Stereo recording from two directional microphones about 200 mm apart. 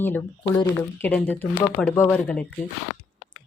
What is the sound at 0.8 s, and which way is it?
Speech, 10° left (ahead or behind).